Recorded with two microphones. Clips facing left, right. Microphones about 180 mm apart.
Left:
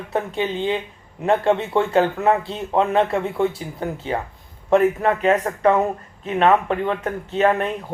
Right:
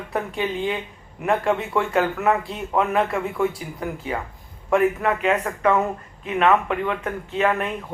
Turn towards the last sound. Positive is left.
turn(degrees=35)  # may be behind; listen again after turning